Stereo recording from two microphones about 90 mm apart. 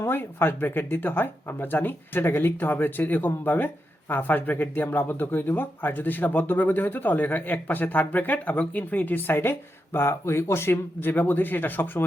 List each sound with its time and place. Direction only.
0.0 s speech: 25° left (ahead or behind)